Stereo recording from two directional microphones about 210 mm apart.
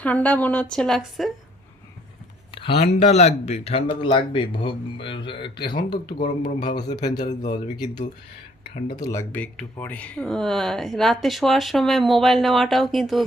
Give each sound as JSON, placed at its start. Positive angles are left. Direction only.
{"t": 0.0, "sound": "speech", "side_deg": 5}
{"t": 2.5, "sound": "speech", "side_deg": 25}
{"t": 6.1, "sound": "speech", "side_deg": 35}
{"t": 6.7, "sound": "speech", "side_deg": 20}
{"t": 8.9, "sound": "speech", "side_deg": 15}